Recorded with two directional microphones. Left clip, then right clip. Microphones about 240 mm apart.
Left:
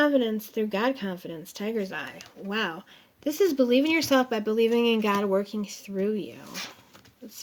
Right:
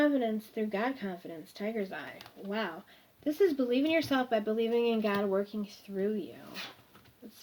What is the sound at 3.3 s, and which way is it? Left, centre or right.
Speech, left.